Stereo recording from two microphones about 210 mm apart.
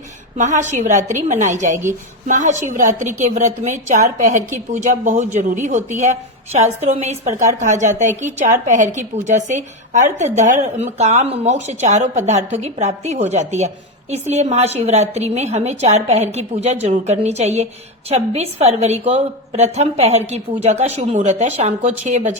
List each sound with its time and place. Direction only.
0.3 s a woman's voice: 35° right (ahead or behind)